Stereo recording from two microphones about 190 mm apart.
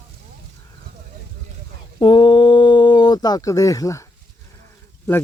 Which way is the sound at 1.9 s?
25° left (ahead or behind).